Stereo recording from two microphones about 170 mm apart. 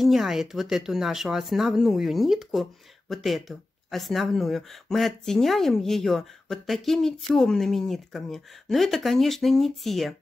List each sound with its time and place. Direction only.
0.0 s speech: centre (ahead or behind)